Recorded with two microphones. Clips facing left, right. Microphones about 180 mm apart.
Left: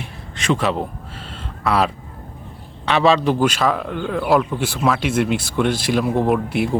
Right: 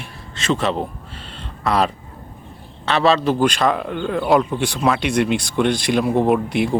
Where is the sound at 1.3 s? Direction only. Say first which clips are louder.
Even; 5° left (ahead or behind).